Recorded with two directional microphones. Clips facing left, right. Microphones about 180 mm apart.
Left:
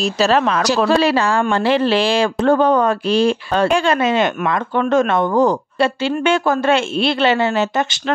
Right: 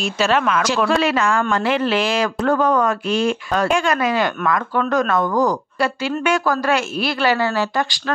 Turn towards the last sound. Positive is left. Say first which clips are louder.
# left 3 dB
turn(degrees=20)  # may be behind; listen again after turning